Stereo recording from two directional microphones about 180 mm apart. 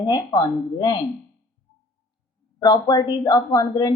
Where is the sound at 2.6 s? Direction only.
20° left (ahead or behind).